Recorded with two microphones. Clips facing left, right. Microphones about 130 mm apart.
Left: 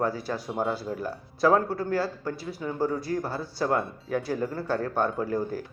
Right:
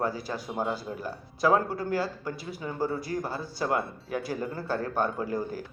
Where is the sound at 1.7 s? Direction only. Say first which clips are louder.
Left 2 dB; 30° left (ahead or behind).